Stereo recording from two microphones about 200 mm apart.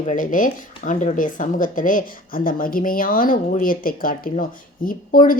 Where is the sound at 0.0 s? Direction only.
40° left (ahead or behind).